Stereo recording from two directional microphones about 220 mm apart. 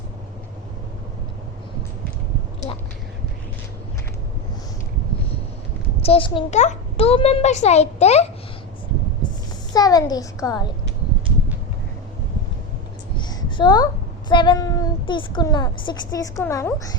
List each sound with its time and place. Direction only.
6.0 s a child's voice: 25° left (ahead or behind)
9.7 s speech: 15° left (ahead or behind)
13.1 s a sound: 20° left (ahead or behind)
14.3 s speech: 20° left (ahead or behind)